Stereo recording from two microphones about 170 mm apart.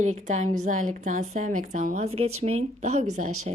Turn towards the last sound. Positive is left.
turn(degrees=-45)  # may be behind; listen again after turning